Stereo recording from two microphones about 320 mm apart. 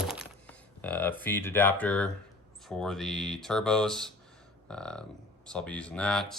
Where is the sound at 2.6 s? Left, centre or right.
Centre.